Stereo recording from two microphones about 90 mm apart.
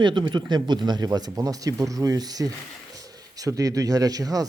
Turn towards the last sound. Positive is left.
turn(degrees=-45)  # may be behind; listen again after turning